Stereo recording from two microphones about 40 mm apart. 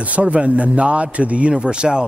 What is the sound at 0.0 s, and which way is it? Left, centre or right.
A man's voice, right.